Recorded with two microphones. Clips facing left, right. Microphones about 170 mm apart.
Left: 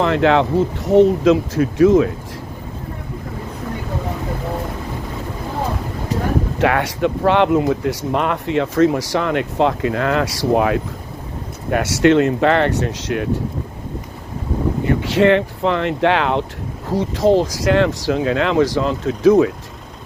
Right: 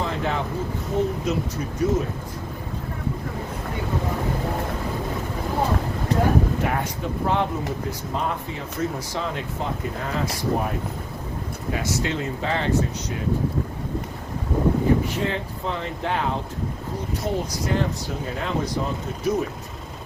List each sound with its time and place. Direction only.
0.0 s speech: 80° left
6.6 s speech: 90° left
11.7 s speech: 75° left (ahead or behind)
14.8 s speech: 85° left